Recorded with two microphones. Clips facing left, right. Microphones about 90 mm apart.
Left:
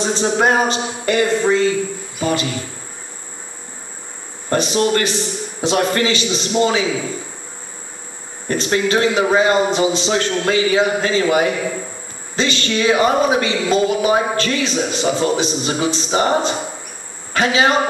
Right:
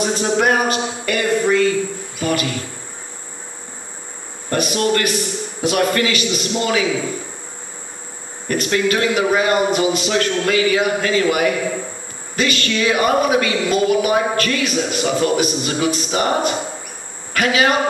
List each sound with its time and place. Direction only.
0.0 s a man's voice: 25° left (ahead or behind)
2.1 s cricket: 25° left (ahead or behind)
4.5 s a man's voice: 25° left (ahead or behind)
8.5 s a man's voice: 25° left (ahead or behind)